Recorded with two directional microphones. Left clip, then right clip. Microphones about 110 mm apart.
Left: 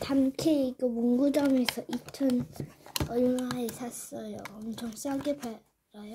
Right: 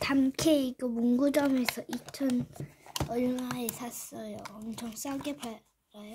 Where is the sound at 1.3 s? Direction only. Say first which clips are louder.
Left 1 dB; 25° right (ahead or behind).